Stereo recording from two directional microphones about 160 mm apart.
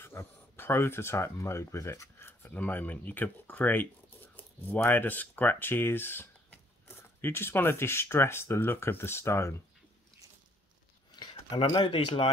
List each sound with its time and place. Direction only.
0.0 s speech: 15° left (ahead or behind)
11.1 s speech: 30° left (ahead or behind)